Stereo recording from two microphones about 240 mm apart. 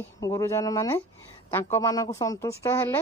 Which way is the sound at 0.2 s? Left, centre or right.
Centre.